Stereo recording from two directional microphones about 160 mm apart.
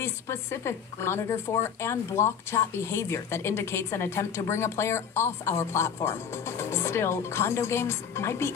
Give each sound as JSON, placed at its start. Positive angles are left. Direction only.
{"t": 0.0, "sound": "a woman's voice", "side_deg": 15}